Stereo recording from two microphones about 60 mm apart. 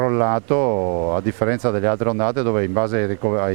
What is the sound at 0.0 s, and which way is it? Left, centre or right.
Speech, right.